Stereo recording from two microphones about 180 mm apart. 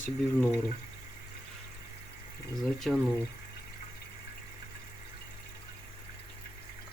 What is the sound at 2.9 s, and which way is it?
Speech, centre (ahead or behind).